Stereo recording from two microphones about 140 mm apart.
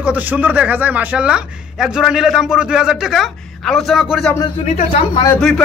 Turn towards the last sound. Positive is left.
turn(degrees=5)  # may be behind; listen again after turning